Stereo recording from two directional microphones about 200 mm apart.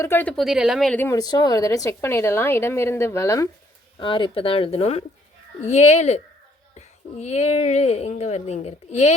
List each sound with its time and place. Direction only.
0.0 s a woman's voice: 10° left (ahead or behind); by 9.1 s 35° left (ahead or behind)